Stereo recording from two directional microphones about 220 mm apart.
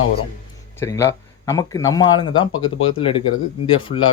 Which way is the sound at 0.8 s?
15° left (ahead or behind).